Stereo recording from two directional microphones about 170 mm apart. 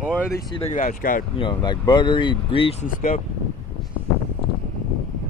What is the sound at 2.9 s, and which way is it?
Speech, 50° left (ahead or behind).